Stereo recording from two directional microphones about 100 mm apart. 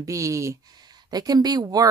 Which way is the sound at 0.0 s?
35° right (ahead or behind).